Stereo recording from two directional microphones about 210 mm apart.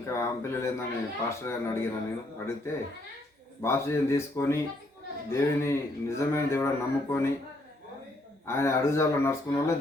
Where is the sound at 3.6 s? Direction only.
10° left (ahead or behind).